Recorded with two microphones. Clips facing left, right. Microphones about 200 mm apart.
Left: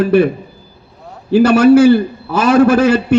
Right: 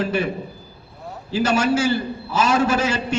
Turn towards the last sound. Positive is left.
turn(degrees=60)  # may be behind; listen again after turning